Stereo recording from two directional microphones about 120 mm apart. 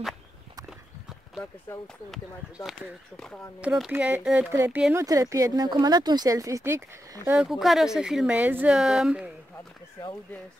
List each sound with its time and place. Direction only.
1.7 s speech: 20° left (ahead or behind)
2.0 s speech: centre (ahead or behind)
4.9 s speech: 25° right (ahead or behind)
7.4 s speech: centre (ahead or behind)